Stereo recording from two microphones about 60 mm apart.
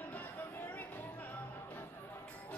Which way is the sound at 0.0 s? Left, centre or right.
Left.